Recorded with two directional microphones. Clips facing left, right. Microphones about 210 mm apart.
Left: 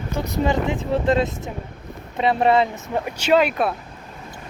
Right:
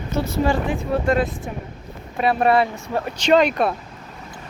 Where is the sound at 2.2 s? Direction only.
25° left (ahead or behind); by 3.7 s 5° left (ahead or behind).